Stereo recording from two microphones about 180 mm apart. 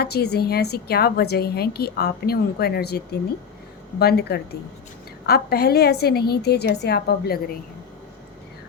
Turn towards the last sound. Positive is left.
turn(degrees=65)  # may be behind; listen again after turning